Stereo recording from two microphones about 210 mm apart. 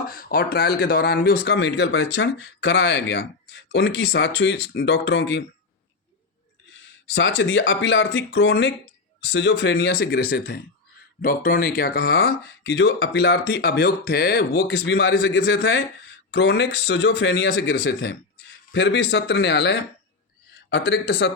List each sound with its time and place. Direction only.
0.0 s speech: 45° left (ahead or behind)
7.1 s speech: 60° left (ahead or behind)
9.7 s speech: 45° left (ahead or behind)